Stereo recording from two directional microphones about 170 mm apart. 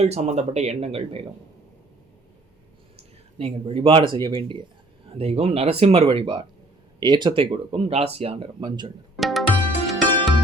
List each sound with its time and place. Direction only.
0.0 s speech: 40° right (ahead or behind)
3.3 s speech: 35° right (ahead or behind)
9.1 s tabla: centre (ahead or behind)
9.8 s music: centre (ahead or behind)